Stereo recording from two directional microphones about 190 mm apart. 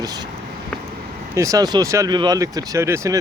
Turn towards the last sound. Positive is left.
turn(degrees=-15)  # may be behind; listen again after turning